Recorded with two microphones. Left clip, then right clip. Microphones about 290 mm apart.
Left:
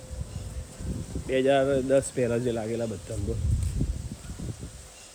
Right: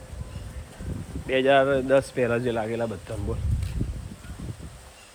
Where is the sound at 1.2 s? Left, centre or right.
Centre.